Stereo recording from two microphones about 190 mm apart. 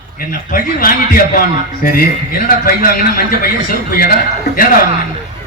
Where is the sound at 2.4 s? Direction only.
50° left (ahead or behind).